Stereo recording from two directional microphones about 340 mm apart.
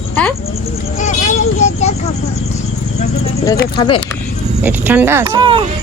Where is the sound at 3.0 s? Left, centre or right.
Centre.